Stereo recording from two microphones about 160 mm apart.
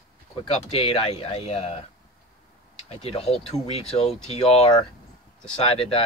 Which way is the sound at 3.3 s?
Centre (ahead or behind).